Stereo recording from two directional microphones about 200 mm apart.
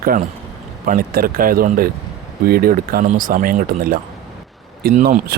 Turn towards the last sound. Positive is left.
turn(degrees=-40)  # may be behind; listen again after turning